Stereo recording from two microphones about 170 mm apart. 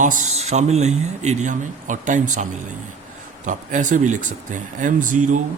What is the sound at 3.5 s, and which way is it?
Speech, 50° right (ahead or behind).